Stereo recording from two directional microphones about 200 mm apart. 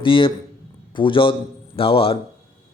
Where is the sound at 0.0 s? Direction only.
25° left (ahead or behind).